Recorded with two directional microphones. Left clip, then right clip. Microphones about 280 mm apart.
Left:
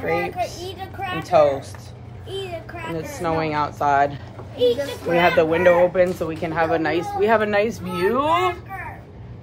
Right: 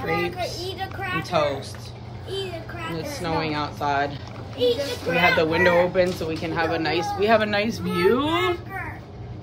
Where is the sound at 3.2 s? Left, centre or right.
Centre.